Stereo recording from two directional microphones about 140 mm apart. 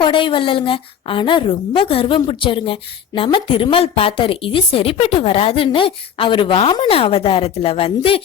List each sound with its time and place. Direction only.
0.0 s a woman's voice: 35° left (ahead or behind)